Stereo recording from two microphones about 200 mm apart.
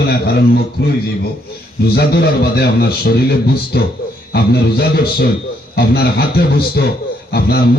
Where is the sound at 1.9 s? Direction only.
55° left (ahead or behind).